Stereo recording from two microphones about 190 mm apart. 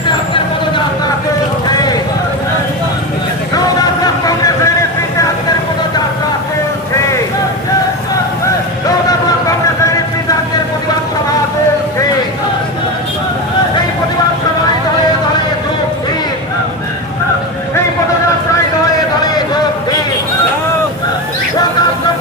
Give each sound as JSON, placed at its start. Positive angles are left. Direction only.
{"t": 1.6, "sound": "clip-clop", "side_deg": 20}
{"t": 3.5, "sound": "vehicle", "side_deg": 20}